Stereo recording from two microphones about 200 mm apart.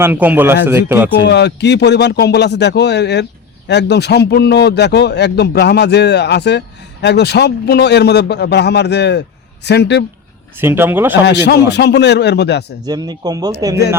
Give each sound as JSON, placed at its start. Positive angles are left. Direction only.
{"t": 0.0, "sound": "speech", "side_deg": -10}
{"t": 1.2, "sound": "a man's voice", "side_deg": 60}
{"t": 10.6, "sound": "speech", "side_deg": -10}
{"t": 11.4, "sound": "a man's voice", "side_deg": 55}
{"t": 12.8, "sound": "speech", "side_deg": -20}